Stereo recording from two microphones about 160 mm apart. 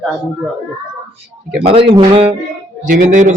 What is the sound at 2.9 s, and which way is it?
Speech, 55° right (ahead or behind).